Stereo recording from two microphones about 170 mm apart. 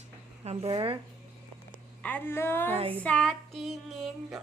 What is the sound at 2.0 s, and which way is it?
Speech, 10° left (ahead or behind).